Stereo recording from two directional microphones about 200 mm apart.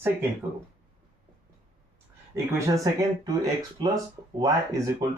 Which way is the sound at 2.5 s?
15° right (ahead or behind).